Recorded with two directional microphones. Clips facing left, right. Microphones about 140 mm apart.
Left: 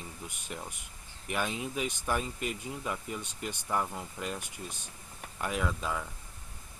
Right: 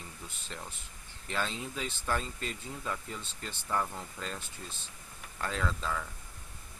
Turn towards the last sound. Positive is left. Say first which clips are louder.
# left 1 dB
turn(degrees=15)  # may be behind; listen again after turning